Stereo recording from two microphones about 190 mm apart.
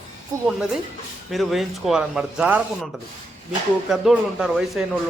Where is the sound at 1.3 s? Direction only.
Centre (ahead or behind).